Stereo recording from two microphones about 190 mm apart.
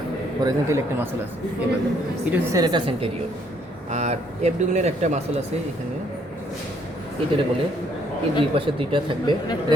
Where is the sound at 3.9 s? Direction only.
35° right (ahead or behind).